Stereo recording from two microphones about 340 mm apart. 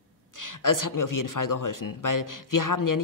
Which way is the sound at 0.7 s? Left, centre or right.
Left.